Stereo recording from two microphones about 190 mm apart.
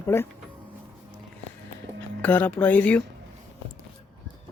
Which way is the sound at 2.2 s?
10° left (ahead or behind).